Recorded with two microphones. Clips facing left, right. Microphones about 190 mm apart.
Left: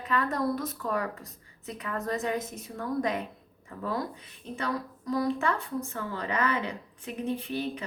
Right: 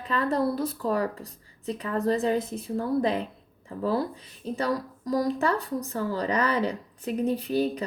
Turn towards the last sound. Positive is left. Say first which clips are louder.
# right 6 dB
turn(degrees=-40)  # may be behind; listen again after turning